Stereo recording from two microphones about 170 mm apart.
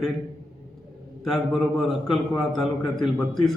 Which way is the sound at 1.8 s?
Centre (ahead or behind).